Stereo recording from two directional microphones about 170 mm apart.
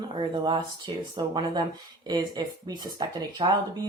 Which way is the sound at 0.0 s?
25° right (ahead or behind).